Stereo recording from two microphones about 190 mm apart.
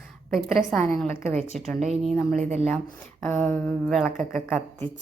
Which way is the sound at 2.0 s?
Centre (ahead or behind).